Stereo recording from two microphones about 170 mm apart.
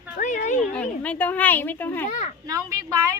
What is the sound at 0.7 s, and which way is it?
Speech, 10° left (ahead or behind).